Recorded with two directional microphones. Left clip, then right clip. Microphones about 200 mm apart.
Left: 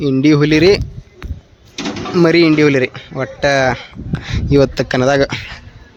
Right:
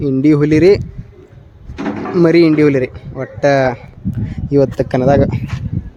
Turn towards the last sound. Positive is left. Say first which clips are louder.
# right 1 dB
turn(degrees=-5)  # may be behind; listen again after turning